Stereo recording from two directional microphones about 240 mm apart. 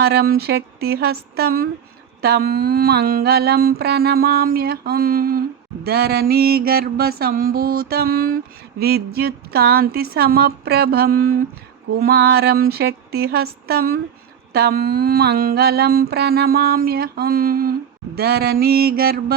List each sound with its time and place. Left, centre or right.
0.0 s mantra: right